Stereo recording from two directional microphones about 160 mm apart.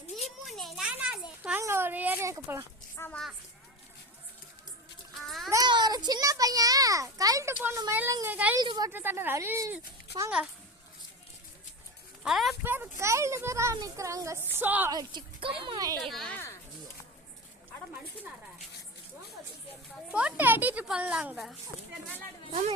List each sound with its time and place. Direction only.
0.4 s a sound: centre (ahead or behind); by 2.6 s 20° right (ahead or behind)
2.9 s a sound: 15° left (ahead or behind)
5.5 s a child's voice: 25° right (ahead or behind)
8.5 s speech: 25° right (ahead or behind)
8.9 s speech: 15° right (ahead or behind)
12.2 s speech: centre (ahead or behind)
12.6 s speech: 10° right (ahead or behind)
14.9 s speech: 30° right (ahead or behind)
16.0 s speech: centre (ahead or behind)
20.1 s speech: 5° right (ahead or behind)